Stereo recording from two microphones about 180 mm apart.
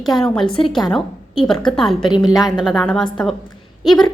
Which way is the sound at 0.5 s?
30° left (ahead or behind).